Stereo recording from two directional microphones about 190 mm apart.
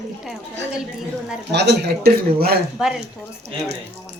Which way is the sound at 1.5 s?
60° right (ahead or behind).